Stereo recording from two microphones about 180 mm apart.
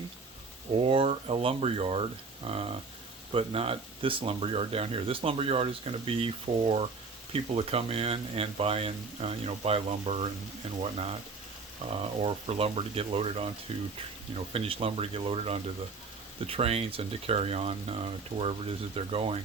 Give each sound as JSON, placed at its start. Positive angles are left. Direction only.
{"t": 0.9, "sound": "speech", "side_deg": -30}
{"t": 11.9, "sound": "speech", "side_deg": -30}